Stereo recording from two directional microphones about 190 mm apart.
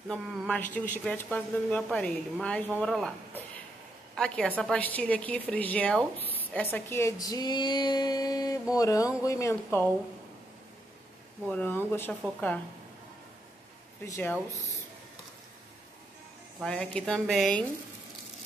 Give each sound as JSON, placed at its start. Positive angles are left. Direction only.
{"t": 0.1, "sound": "a woman's voice", "side_deg": 5}
{"t": 11.4, "sound": "a woman's voice", "side_deg": 10}
{"t": 14.0, "sound": "a woman's voice", "side_deg": 15}
{"t": 16.6, "sound": "speech", "side_deg": 5}